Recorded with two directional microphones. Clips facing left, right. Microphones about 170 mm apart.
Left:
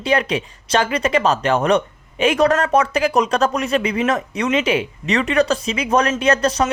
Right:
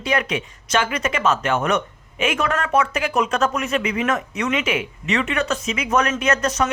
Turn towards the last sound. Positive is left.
turn(degrees=30)  # may be behind; listen again after turning